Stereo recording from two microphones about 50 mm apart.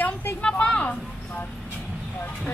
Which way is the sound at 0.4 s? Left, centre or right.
Left.